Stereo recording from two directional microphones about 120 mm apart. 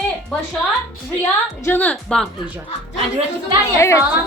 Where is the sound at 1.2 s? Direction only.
15° left (ahead or behind).